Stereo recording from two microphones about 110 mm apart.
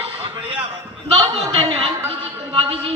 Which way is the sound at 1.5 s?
60° right (ahead or behind).